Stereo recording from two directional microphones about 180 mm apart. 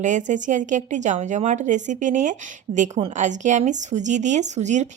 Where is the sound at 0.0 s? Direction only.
45° right (ahead or behind).